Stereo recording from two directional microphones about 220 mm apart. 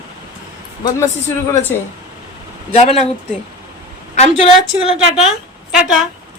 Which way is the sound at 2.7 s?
30° left (ahead or behind).